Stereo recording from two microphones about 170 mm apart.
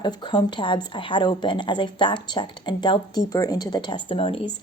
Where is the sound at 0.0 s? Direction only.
25° left (ahead or behind).